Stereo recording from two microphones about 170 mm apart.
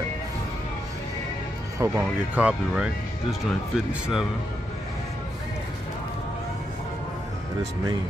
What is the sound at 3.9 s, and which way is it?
Speech, 5° right (ahead or behind).